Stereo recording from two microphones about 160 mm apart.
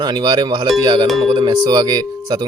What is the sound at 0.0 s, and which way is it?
Speech, 25° right (ahead or behind).